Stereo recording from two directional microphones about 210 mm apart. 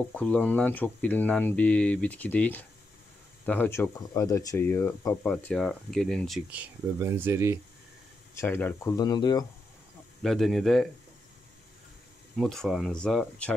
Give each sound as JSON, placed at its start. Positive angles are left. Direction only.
{"t": 0.1, "sound": "speech", "side_deg": 5}
{"t": 8.4, "sound": "speech", "side_deg": 10}
{"t": 10.2, "sound": "speech", "side_deg": 0}
{"t": 12.4, "sound": "speech", "side_deg": 0}